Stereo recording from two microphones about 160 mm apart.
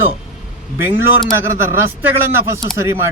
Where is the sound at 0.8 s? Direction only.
15° right (ahead or behind).